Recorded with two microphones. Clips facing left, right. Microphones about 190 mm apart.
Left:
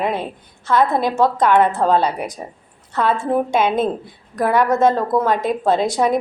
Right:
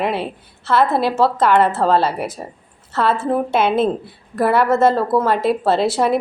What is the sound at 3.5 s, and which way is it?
A woman's voice, 5° right (ahead or behind).